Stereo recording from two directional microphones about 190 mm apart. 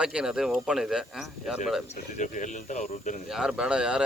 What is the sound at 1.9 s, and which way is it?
Speech, 40° left (ahead or behind).